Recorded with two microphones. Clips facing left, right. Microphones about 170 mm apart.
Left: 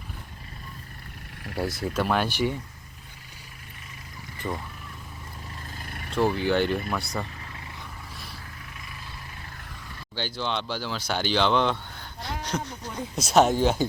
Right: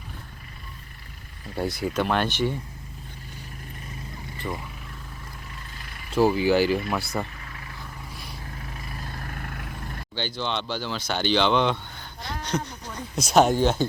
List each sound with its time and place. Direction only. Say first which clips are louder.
1.5 s speech: right 2 dB; centre (ahead or behind)
4.4 s speech: left 1 dB; 5° left (ahead or behind)
6.1 s speech: right 4 dB; 5° right (ahead or behind)
8.6 s vehicle: right 5 dB; 40° right (ahead or behind); by 10.0 s 55° right (ahead or behind)
10.2 s speech: right 1 dB; 5° left (ahead or behind)